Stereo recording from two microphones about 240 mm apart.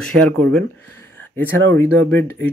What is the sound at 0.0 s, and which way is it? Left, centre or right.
Speech, centre.